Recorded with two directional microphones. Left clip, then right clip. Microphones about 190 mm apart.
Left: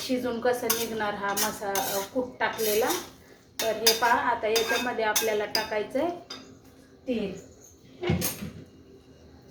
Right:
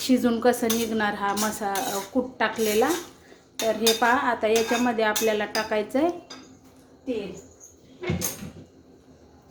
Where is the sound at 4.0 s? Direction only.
65° right (ahead or behind).